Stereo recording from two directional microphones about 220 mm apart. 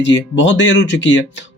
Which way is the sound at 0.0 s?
55° left (ahead or behind).